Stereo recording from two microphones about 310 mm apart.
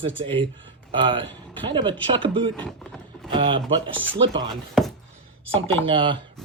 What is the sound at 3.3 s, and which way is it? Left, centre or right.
Speech, centre.